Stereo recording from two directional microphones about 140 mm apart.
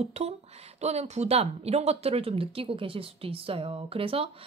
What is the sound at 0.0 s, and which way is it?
Speech, 50° right (ahead or behind).